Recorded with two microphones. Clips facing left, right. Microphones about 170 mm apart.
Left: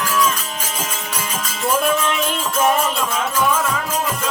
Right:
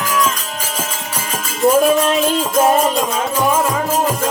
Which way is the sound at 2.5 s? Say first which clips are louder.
Right 3 dB; 35° right (ahead or behind).